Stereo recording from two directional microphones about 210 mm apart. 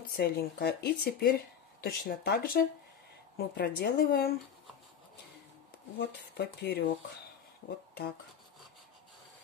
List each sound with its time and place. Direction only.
0.1 s speech: 45° left (ahead or behind)
5.9 s speech: 50° left (ahead or behind)